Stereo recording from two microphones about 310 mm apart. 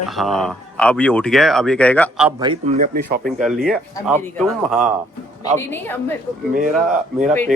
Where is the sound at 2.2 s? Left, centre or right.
Centre.